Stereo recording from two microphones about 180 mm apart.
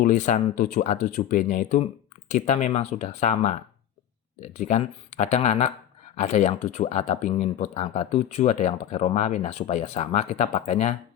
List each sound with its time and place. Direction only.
0.0 s speech: 45° left (ahead or behind)